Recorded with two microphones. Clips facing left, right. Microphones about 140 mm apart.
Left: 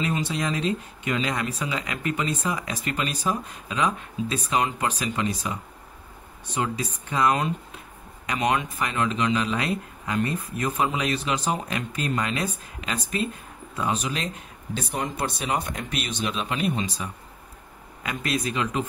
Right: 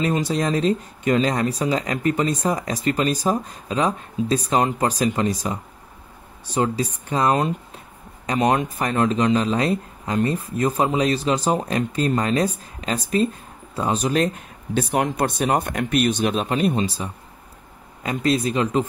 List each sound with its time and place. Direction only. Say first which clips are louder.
0.0 s speech: right 5 dB; 40° right (ahead or behind)